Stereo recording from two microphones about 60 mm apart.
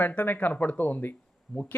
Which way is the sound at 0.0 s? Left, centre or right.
Left.